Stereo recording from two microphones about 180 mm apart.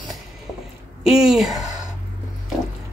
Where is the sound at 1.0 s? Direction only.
Centre (ahead or behind).